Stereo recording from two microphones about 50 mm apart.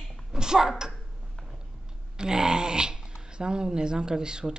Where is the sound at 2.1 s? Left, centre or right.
Centre.